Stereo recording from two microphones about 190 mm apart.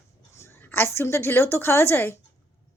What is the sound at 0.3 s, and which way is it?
A woman's voice, 15° left (ahead or behind).